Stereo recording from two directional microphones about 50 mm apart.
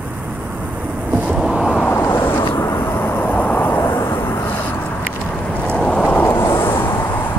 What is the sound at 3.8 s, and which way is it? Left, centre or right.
Vehicle, left.